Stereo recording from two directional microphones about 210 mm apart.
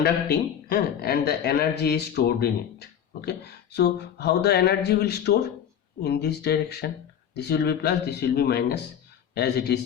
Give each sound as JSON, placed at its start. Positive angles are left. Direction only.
{"t": 0.0, "sound": "a man's voice", "side_deg": 50}